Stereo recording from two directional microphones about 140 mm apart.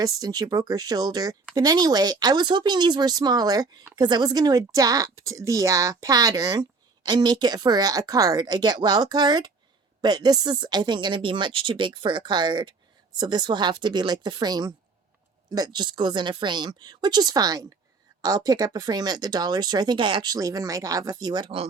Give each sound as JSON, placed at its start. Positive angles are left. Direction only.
{"t": 0.0, "sound": "speech", "side_deg": -30}